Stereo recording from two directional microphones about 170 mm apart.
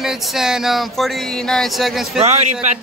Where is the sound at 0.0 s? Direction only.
Centre (ahead or behind).